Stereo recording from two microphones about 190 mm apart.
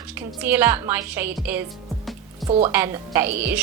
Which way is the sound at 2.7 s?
10° right (ahead or behind).